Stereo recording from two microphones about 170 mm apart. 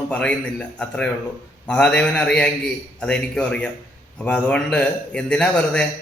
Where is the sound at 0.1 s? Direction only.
5° left (ahead or behind).